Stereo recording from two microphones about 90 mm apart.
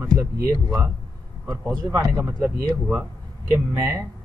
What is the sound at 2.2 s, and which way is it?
Speech, 25° right (ahead or behind).